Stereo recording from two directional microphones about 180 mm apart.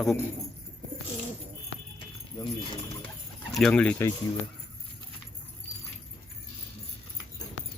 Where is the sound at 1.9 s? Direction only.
25° left (ahead or behind).